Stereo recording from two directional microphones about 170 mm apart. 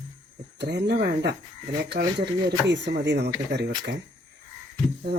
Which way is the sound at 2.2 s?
85° right.